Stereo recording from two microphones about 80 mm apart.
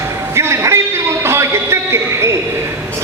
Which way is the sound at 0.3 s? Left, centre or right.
Right.